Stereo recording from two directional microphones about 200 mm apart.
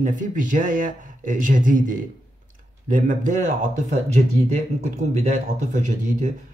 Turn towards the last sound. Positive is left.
turn(degrees=-35)  # may be behind; listen again after turning